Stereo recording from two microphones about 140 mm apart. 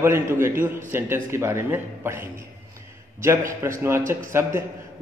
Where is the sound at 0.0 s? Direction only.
20° right (ahead or behind).